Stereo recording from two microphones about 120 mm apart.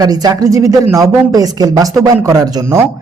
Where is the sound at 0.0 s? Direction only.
30° right (ahead or behind).